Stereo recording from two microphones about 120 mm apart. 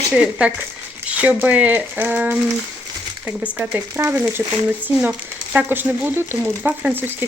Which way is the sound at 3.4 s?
10° right (ahead or behind).